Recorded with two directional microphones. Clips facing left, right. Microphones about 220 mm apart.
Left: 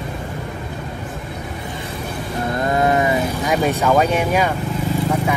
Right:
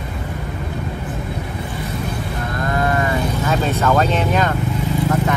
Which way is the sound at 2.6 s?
20° left (ahead or behind).